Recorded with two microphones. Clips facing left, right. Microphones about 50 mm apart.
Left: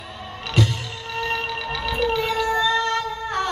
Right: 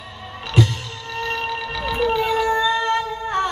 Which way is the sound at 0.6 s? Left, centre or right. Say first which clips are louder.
Right 2 dB; centre.